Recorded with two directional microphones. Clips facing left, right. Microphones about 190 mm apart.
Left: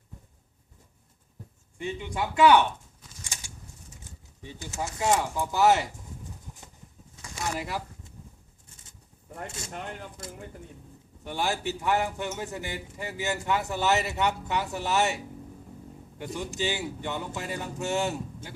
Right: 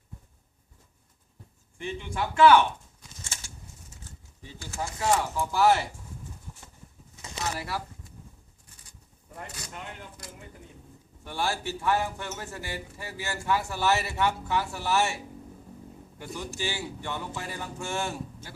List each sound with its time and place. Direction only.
1.8 s speech: 15° left (ahead or behind)
3.3 s a sound: 15° left (ahead or behind)
4.4 s a man's voice: 20° left (ahead or behind)
7.2 s bird: 20° right (ahead or behind)
7.4 s speech: 15° left (ahead or behind)
8.7 s bird: 25° left (ahead or behind)
9.5 s a man's voice: 25° left (ahead or behind)
11.2 s a man's voice: 20° left (ahead or behind)